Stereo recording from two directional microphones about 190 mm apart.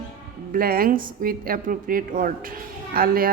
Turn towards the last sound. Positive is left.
turn(degrees=-50)  # may be behind; listen again after turning